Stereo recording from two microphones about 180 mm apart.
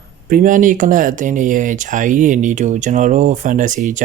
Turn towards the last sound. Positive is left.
turn(degrees=-45)  # may be behind; listen again after turning